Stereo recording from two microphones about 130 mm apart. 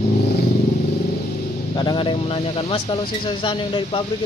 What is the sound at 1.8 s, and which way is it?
Speech, 35° left (ahead or behind).